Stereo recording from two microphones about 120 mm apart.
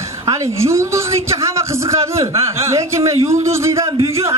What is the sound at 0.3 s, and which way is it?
A man's voice, 25° right (ahead or behind).